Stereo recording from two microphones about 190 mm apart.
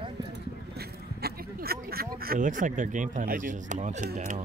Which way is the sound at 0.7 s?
55° right (ahead or behind).